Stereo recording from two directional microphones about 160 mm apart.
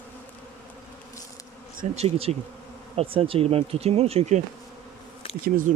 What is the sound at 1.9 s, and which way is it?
Speech, 40° right (ahead or behind).